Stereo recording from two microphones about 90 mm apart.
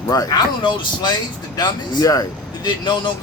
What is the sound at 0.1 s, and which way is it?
Speech, 40° left (ahead or behind).